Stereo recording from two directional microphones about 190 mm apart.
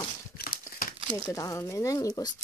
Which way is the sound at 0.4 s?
50° left (ahead or behind).